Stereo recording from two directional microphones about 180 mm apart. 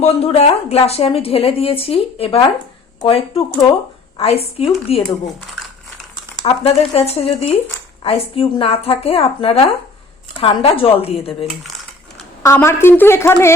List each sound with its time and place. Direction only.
0.0 s a woman's voice: 35° left (ahead or behind)
4.9 s speech: centre (ahead or behind)
6.4 s a woman's voice: 35° left (ahead or behind)
12.4 s a woman's voice: 15° left (ahead or behind)